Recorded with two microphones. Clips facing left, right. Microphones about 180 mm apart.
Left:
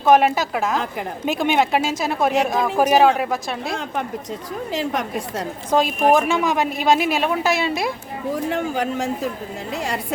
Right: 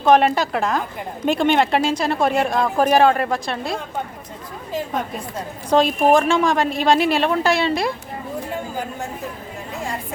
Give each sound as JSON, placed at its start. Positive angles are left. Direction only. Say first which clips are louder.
{"t": 0.0, "sound": "speech", "louder": "even", "side_deg": 5}
{"t": 4.7, "sound": "a woman's voice", "louder": "left 1 dB", "side_deg": 85}
{"t": 5.7, "sound": "speech", "louder": "right 2 dB", "side_deg": 5}
{"t": 8.4, "sound": "a sound", "louder": "left 5 dB", "side_deg": 80}